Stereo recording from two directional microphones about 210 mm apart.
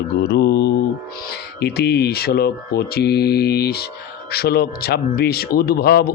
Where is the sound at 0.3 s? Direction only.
55° left (ahead or behind).